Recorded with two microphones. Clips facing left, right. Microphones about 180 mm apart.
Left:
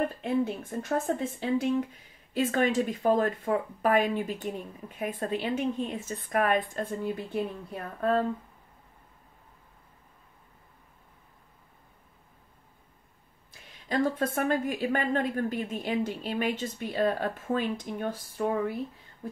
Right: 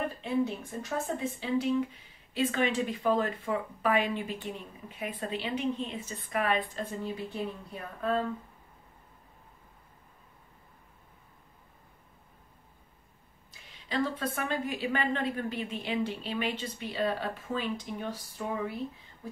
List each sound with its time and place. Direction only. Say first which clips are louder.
0.2 s a woman's voice: left 2 dB; 50° left (ahead or behind)
13.5 s a woman's voice: left 5 dB; 45° left (ahead or behind)